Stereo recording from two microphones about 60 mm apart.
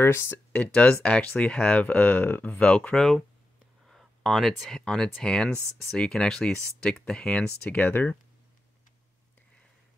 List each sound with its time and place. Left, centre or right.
0.0 s speech: left
0.5 s speech: left
3.0 s speech: centre; by 8.2 s left